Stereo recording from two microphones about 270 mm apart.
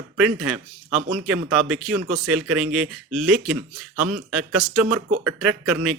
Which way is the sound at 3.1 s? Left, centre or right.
Centre.